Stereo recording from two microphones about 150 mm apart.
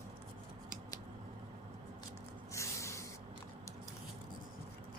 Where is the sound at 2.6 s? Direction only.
20° left (ahead or behind).